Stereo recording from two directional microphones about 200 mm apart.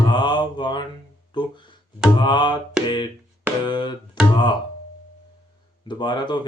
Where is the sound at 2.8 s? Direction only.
20° left (ahead or behind).